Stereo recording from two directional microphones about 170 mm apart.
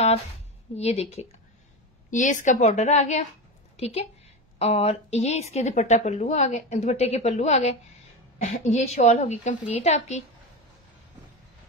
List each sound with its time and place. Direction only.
0.7 s a woman's voice: 40° left (ahead or behind)
2.0 s a woman's voice: 50° left (ahead or behind)